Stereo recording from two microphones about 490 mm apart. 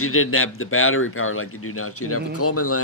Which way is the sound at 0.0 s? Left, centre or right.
Left.